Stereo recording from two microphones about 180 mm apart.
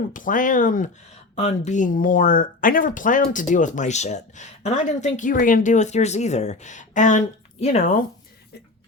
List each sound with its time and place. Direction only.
0.1 s speech: 45° left (ahead or behind)